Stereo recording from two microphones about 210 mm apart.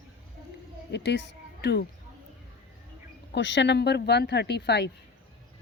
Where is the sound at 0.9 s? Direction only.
55° left (ahead or behind).